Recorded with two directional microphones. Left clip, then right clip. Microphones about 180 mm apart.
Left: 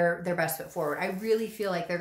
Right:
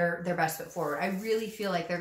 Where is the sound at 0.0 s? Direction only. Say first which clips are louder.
Left 2 dB; 35° left (ahead or behind).